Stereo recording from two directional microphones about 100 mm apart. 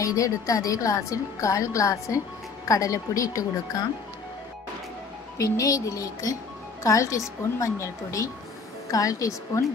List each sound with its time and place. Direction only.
0.0 s a woman's voice: 35° left (ahead or behind)
5.4 s a woman's voice: 35° left (ahead or behind)